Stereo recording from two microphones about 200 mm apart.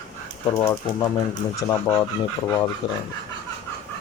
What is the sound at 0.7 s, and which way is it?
Speech, 20° left (ahead or behind).